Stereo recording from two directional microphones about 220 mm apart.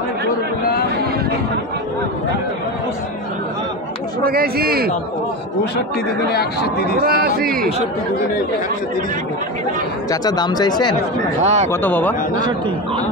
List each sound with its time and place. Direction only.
4.2 s speech: 40° right (ahead or behind)
7.1 s speech: 45° right (ahead or behind)
10.2 s speech: 20° left (ahead or behind)
11.4 s speech: 30° right (ahead or behind)
11.7 s speech: 10° left (ahead or behind)